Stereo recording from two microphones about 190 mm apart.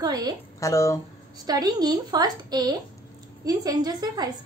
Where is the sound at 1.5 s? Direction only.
20° right (ahead or behind).